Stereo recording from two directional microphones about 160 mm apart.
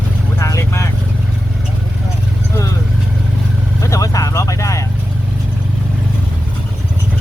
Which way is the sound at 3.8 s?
20° left (ahead or behind).